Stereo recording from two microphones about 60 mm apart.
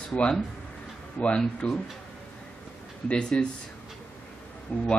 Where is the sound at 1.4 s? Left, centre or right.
Centre.